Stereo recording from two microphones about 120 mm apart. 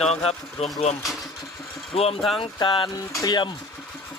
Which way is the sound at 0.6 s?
65° left (ahead or behind).